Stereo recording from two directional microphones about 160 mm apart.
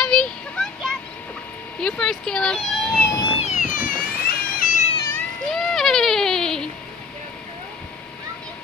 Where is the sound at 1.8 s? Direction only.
5° left (ahead or behind).